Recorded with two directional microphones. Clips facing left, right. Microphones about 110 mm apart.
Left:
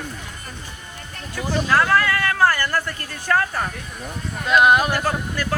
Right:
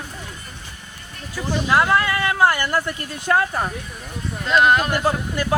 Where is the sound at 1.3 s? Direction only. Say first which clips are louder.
Even; 15° right (ahead or behind).